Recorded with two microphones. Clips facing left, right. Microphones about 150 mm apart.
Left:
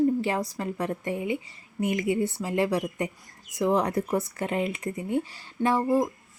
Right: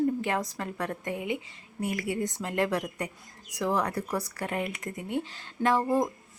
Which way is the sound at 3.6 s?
25° left (ahead or behind).